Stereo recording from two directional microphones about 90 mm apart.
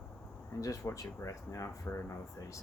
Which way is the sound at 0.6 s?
40° left (ahead or behind).